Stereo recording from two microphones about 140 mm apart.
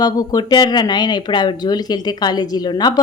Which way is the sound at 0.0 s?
25° left (ahead or behind).